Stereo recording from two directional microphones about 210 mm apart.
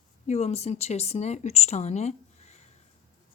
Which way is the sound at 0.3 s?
30° left (ahead or behind).